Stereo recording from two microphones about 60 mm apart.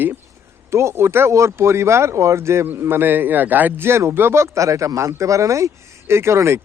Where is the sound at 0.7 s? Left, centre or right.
Right.